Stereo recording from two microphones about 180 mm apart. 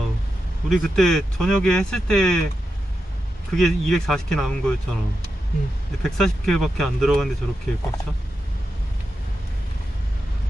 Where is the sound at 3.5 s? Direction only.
5° left (ahead or behind).